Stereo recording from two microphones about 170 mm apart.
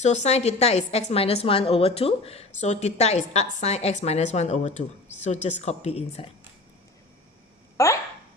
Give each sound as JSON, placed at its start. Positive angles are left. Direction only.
{"t": 0.0, "sound": "a woman's voice", "side_deg": 40}
{"t": 7.8, "sound": "speech", "side_deg": 15}